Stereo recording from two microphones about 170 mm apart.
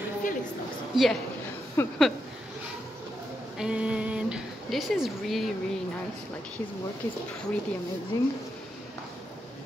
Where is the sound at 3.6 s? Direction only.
5° right (ahead or behind).